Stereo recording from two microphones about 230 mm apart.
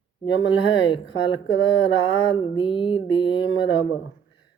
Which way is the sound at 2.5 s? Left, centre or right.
Left.